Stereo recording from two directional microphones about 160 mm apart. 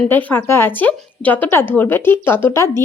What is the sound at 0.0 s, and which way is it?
Speech, 10° left (ahead or behind).